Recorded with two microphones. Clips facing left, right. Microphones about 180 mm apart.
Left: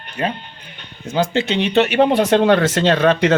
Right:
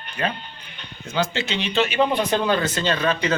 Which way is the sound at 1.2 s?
55° left (ahead or behind).